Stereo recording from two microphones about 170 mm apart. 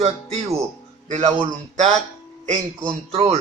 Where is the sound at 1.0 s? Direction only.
45° right (ahead or behind).